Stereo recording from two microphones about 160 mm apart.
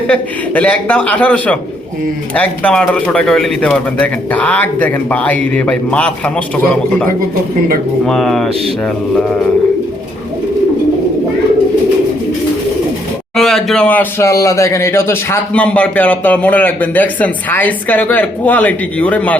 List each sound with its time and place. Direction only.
0.1 s speech: 5° left (ahead or behind)
8.0 s speech: 5° left (ahead or behind)
13.3 s speech: centre (ahead or behind)